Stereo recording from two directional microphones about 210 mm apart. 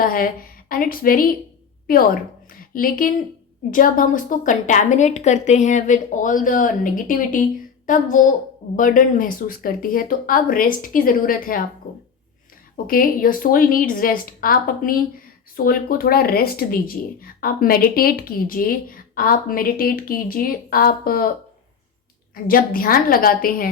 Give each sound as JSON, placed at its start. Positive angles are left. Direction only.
{"t": 0.0, "sound": "a woman's voice", "side_deg": 45}
{"t": 12.7, "sound": "a woman's voice", "side_deg": 45}
{"t": 22.4, "sound": "a woman's voice", "side_deg": 45}